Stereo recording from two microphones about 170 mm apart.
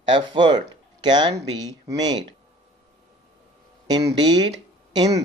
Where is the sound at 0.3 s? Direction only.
25° right (ahead or behind).